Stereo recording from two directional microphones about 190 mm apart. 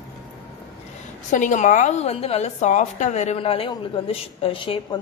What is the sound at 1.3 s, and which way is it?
A woman's voice, 40° left (ahead or behind).